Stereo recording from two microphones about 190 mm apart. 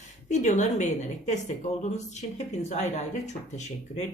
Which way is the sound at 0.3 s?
40° left (ahead or behind).